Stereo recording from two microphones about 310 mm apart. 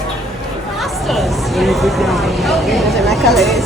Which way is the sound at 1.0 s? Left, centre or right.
Centre.